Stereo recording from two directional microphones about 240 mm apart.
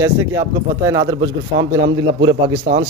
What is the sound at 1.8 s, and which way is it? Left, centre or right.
Speech, right.